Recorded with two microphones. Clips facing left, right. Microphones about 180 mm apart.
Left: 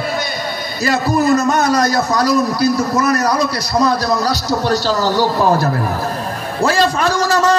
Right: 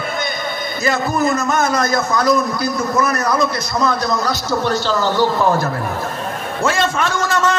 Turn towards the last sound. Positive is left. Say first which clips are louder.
# left 3 dB
turn(degrees=35)  # may be behind; listen again after turning